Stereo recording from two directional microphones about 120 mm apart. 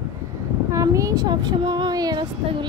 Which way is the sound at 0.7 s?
25° right (ahead or behind).